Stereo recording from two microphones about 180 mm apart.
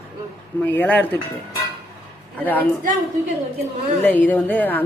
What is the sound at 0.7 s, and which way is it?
Speech, 10° left (ahead or behind).